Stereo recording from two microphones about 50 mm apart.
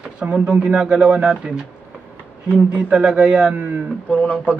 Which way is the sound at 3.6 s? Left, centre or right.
Right.